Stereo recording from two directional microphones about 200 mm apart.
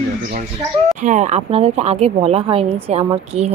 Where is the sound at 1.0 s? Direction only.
35° right (ahead or behind).